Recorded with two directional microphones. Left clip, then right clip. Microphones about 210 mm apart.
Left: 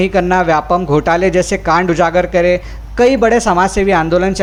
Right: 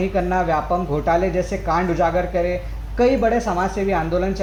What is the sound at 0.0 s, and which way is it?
A man's voice, 30° left (ahead or behind).